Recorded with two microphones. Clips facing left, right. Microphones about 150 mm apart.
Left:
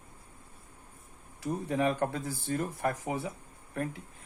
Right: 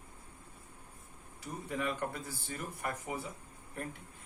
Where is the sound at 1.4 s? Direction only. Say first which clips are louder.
Left 8 dB; 75° left (ahead or behind).